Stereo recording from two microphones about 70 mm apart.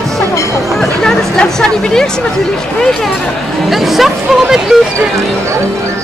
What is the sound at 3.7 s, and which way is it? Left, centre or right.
Speech, centre.